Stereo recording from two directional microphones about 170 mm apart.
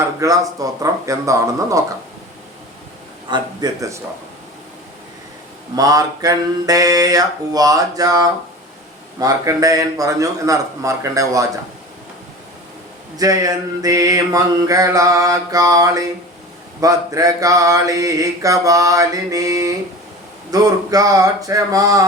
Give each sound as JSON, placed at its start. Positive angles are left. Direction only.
{"t": 0.0, "sound": "mantra", "side_deg": -20}
{"t": 3.2, "sound": "mantra", "side_deg": -25}
{"t": 5.7, "sound": "mantra", "side_deg": -20}
{"t": 13.1, "sound": "mantra", "side_deg": -20}